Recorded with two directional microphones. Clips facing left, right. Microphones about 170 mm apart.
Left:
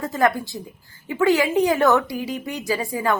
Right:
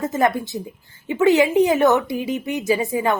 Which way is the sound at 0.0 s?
20° right (ahead or behind).